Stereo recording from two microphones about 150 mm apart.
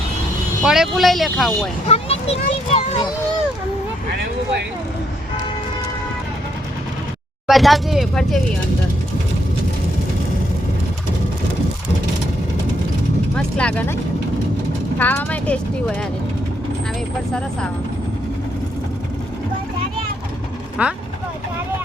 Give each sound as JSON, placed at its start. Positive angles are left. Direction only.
{"t": 0.6, "sound": "speech", "side_deg": -5}
{"t": 1.9, "sound": "a child's voice", "side_deg": 45}
{"t": 7.4, "sound": "speech", "side_deg": 0}
{"t": 13.3, "sound": "speech", "side_deg": 5}
{"t": 20.8, "sound": "speech", "side_deg": -10}